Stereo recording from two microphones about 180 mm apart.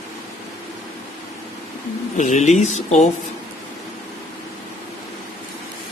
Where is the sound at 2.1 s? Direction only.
40° left (ahead or behind).